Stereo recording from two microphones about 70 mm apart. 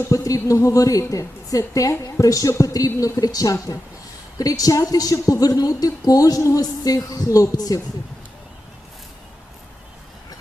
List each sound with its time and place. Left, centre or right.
0.1 s a woman's voice: left